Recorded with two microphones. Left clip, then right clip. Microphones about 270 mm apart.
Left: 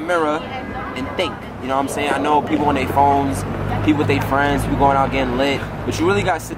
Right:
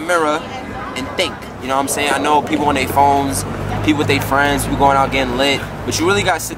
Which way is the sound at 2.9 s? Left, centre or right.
Left.